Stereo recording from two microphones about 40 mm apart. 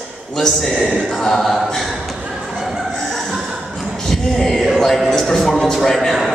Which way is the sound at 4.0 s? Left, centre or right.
Centre.